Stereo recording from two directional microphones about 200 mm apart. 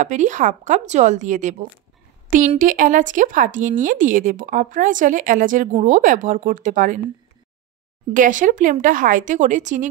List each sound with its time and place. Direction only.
0.0 s speech: 35° right (ahead or behind)
2.6 s speech: 40° right (ahead or behind)
8.1 s speech: 40° right (ahead or behind)